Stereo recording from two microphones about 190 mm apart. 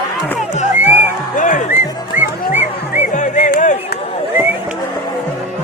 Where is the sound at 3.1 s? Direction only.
40° left (ahead or behind).